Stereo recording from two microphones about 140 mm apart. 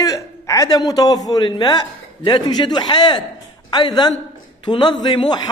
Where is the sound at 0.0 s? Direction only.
25° left (ahead or behind).